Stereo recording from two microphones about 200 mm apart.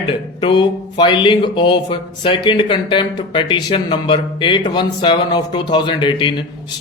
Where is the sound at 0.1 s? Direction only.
25° left (ahead or behind).